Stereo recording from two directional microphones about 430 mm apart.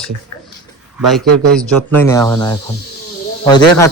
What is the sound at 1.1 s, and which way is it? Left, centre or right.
A man's voice, centre.